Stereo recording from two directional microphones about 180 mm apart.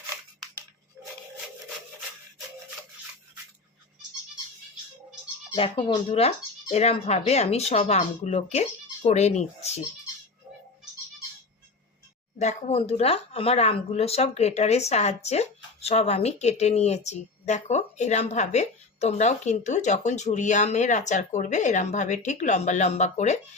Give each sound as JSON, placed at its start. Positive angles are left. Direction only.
{"t": 5.5, "sound": "speech", "side_deg": 30}
{"t": 12.4, "sound": "speech", "side_deg": 40}